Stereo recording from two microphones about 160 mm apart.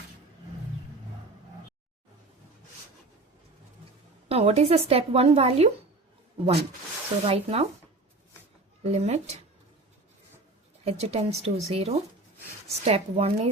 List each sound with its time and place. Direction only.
4.3 s a woman's voice: 40° right (ahead or behind)
7.3 s a woman's voice: 40° right (ahead or behind)
8.8 s speech: 45° right (ahead or behind)
10.8 s a woman's voice: 40° right (ahead or behind)